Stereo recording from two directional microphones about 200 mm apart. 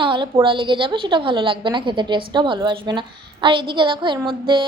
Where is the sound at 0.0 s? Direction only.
25° right (ahead or behind).